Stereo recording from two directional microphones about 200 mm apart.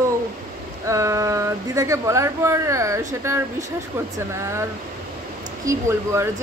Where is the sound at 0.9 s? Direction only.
15° right (ahead or behind).